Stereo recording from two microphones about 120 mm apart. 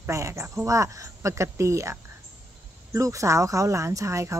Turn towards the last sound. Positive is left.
turn(degrees=-25)  # may be behind; listen again after turning